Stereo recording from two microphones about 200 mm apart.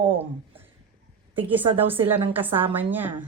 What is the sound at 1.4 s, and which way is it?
A woman's voice, 10° right (ahead or behind).